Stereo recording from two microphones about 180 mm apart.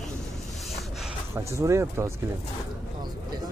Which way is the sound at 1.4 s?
15° right (ahead or behind).